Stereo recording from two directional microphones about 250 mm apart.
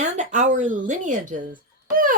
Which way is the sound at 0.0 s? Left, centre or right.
Right.